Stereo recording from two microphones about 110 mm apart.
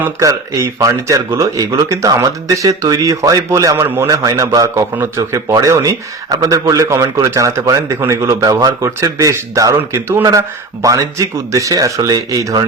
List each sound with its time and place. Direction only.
0.2 s a man's voice: 30° right (ahead or behind)
4.1 s a man's voice: 35° right (ahead or behind)
10.8 s speech: 30° right (ahead or behind)